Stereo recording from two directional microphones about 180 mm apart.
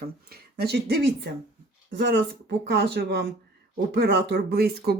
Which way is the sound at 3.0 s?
70° right (ahead or behind).